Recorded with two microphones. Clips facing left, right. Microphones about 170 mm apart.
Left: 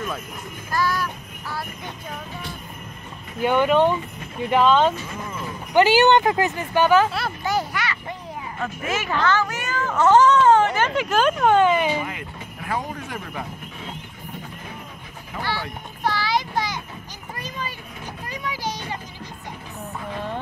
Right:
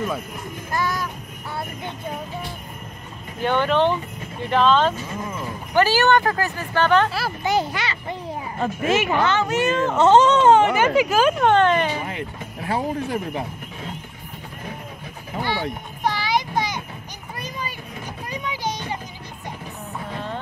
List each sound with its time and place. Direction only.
0.7 s child singing: 20° right (ahead or behind)
3.4 s speech: 10° left (ahead or behind)
7.4 s a child's voice: 25° right (ahead or behind); by 11.5 s 5° right (ahead or behind)
11.5 s speech: 10° left (ahead or behind)
12.1 s speech: 30° right (ahead or behind)
15.4 s a sound: 15° right (ahead or behind)
17.4 s vehicle: 15° right (ahead or behind)
18.3 s a sound: 20° right (ahead or behind)